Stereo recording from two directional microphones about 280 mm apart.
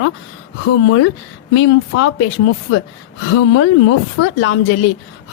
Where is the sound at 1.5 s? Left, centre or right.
Left.